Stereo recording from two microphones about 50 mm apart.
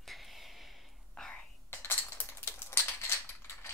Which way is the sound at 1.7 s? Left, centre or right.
Left.